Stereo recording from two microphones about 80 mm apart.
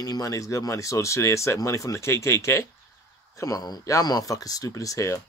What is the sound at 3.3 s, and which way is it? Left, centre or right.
Speech, left.